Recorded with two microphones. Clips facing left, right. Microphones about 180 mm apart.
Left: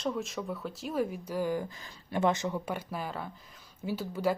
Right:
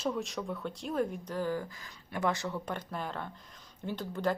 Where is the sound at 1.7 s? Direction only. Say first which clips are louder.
Left 5 dB; 25° left (ahead or behind).